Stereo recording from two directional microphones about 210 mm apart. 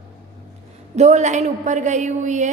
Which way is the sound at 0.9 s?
35° right (ahead or behind).